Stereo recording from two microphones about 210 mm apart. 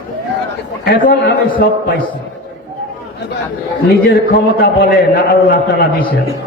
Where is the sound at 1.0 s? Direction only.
50° left (ahead or behind).